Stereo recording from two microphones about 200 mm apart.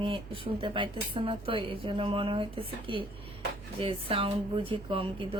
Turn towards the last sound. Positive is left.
turn(degrees=-25)  # may be behind; listen again after turning